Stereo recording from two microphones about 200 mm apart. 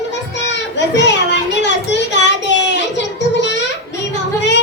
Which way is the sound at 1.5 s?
60° left (ahead or behind).